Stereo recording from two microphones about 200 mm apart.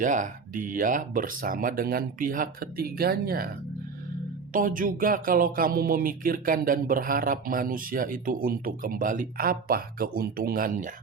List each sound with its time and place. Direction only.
0.0 s speech: 40° right (ahead or behind)
4.5 s speech: 45° right (ahead or behind)